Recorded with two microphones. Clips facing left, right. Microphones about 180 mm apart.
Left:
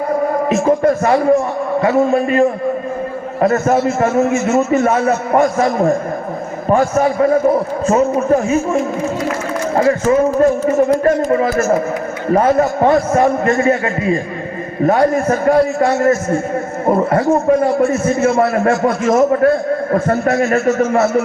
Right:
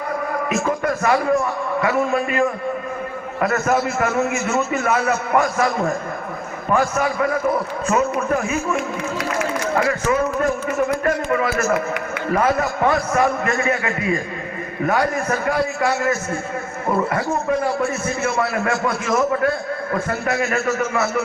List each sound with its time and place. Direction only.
0.5 s a man's voice: 35° left (ahead or behind)
10.2 s a man's voice: 35° left (ahead or behind)
12.3 s a man's voice: 30° left (ahead or behind)
17.6 s a man's voice: 25° left (ahead or behind)
18.3 s a man's voice: 40° left (ahead or behind)